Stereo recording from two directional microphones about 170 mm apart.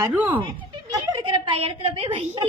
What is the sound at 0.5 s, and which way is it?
A woman's voice, 30° right (ahead or behind).